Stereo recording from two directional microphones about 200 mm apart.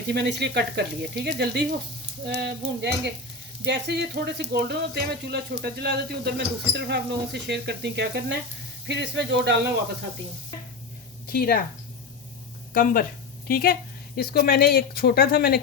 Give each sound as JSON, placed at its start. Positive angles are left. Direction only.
{"t": 0.1, "sound": "speech", "side_deg": -55}
{"t": 11.3, "sound": "speech", "side_deg": 50}
{"t": 12.7, "sound": "speech", "side_deg": 45}